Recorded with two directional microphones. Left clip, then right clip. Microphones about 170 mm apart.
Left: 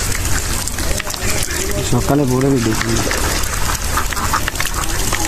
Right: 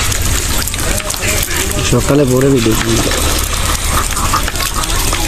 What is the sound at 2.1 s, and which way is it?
Speech, 40° left (ahead or behind).